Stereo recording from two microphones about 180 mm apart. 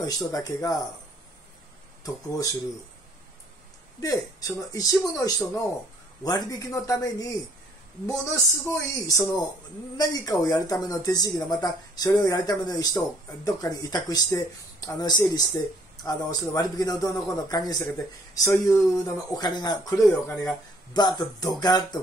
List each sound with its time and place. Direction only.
0.0 s speech: 20° left (ahead or behind)
2.0 s speech: 20° left (ahead or behind)
4.0 s speech: 20° left (ahead or behind)
21.2 s speech: 20° left (ahead or behind)